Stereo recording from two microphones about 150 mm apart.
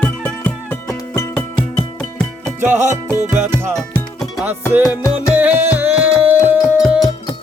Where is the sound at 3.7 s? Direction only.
5° left (ahead or behind).